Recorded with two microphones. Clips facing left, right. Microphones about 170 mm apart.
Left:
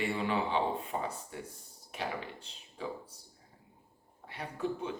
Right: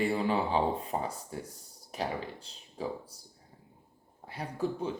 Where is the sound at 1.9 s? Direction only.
35° right (ahead or behind).